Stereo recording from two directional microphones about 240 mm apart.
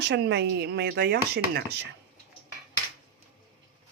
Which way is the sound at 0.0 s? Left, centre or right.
Right.